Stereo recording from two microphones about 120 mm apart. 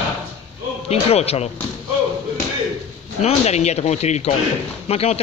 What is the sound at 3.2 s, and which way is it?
Speech, 65° left (ahead or behind).